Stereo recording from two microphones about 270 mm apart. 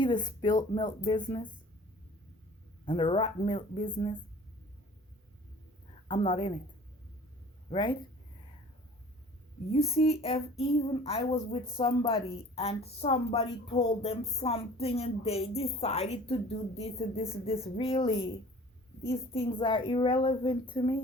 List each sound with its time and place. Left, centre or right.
0.0 s a woman's voice: centre
2.8 s a woman's voice: centre
6.1 s a woman's voice: centre
7.7 s a woman's voice: centre
9.7 s a woman's voice: left